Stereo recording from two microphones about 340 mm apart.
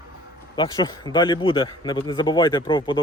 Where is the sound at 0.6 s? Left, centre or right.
Centre.